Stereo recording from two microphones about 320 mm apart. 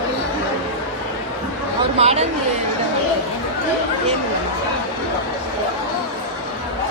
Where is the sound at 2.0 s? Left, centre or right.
Centre.